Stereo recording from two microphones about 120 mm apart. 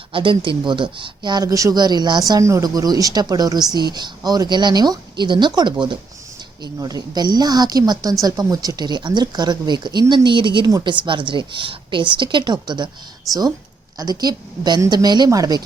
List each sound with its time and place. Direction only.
0.1 s a woman's voice: 45° right (ahead or behind)
14.0 s speech: 35° right (ahead or behind)